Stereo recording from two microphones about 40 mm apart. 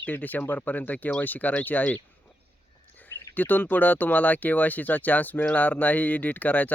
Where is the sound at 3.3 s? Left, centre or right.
Left.